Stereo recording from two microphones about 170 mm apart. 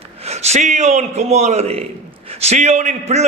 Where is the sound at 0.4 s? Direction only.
45° right (ahead or behind).